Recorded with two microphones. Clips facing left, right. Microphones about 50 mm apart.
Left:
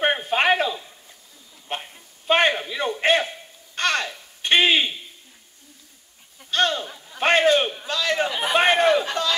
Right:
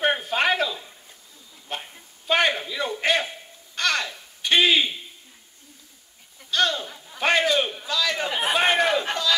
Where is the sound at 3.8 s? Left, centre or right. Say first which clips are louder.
Left 1 dB; left.